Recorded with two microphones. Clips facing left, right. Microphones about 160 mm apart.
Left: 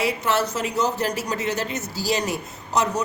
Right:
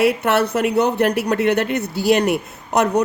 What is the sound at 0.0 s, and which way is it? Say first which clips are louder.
A woman's voice: right 6 dB; 60° right (ahead or behind).